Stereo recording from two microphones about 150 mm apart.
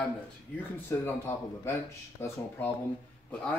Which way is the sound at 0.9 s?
15° left (ahead or behind).